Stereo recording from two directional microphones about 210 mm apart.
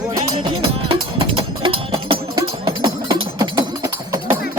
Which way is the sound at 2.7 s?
20° right (ahead or behind).